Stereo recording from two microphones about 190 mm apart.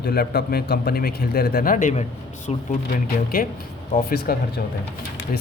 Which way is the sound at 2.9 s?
50° left (ahead or behind).